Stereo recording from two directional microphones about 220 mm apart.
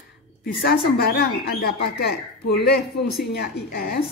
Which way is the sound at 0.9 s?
45° left (ahead or behind).